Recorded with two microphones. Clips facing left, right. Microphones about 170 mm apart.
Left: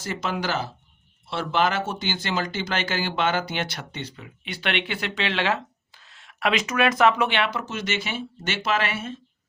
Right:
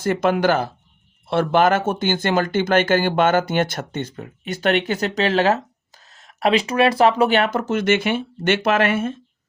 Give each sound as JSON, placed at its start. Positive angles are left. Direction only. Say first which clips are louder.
{"t": 0.0, "sound": "speech", "louder": "right 10 dB", "side_deg": -55}